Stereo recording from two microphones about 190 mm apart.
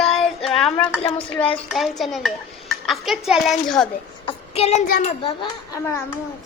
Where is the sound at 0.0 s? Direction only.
Centre (ahead or behind).